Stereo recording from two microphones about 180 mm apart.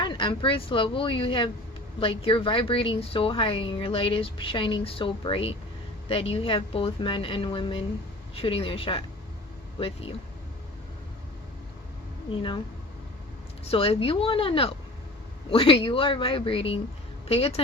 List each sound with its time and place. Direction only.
0.0 s speech: 25° left (ahead or behind)
12.3 s speech: 25° left (ahead or behind)
13.7 s speech: 30° left (ahead or behind)